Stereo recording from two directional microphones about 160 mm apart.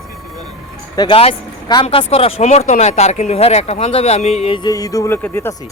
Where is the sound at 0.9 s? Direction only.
30° left (ahead or behind).